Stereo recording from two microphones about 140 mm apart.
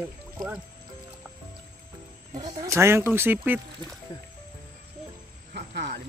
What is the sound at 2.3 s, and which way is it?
Speech, 30° right (ahead or behind).